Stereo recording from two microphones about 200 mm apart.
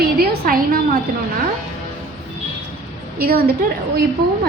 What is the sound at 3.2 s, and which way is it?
Speech, 50° right (ahead or behind).